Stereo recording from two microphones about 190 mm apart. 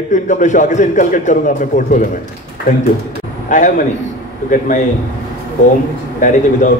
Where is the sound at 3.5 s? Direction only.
40° left (ahead or behind).